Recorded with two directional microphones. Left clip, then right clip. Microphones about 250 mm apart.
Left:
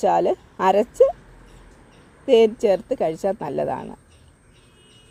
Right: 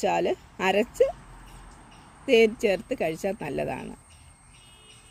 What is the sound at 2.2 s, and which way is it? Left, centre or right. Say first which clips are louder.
Speech: left 5 dB; left.